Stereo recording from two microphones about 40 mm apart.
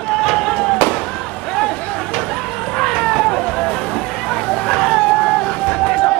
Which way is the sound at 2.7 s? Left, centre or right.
Centre.